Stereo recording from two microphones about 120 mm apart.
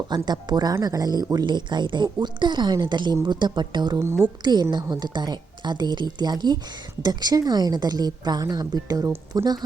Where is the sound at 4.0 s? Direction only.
20° right (ahead or behind).